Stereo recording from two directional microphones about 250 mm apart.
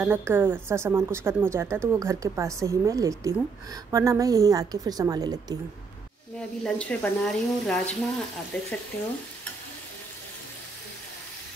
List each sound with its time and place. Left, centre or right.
0.0 s a woman's voice: centre
6.3 s speech: centre